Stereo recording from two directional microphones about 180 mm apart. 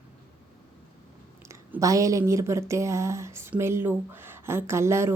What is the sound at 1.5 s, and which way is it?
A woman's voice, 15° right (ahead or behind).